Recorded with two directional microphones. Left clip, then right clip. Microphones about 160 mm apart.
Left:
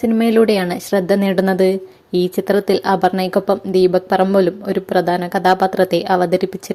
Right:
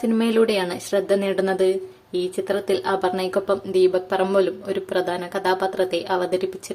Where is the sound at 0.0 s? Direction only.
25° left (ahead or behind).